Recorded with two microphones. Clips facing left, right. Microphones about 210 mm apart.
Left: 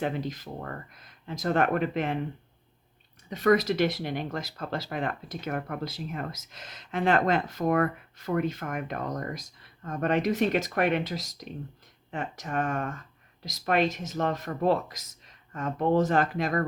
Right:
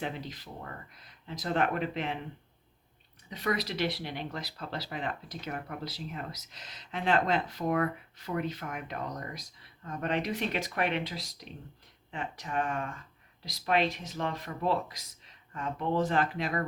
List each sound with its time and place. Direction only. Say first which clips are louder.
0.0 s speech: left 7 dB; 45° left (ahead or behind)
3.2 s speech: left 10 dB; 50° left (ahead or behind)